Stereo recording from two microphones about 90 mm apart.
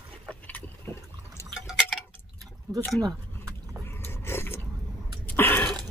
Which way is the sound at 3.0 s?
45° right (ahead or behind).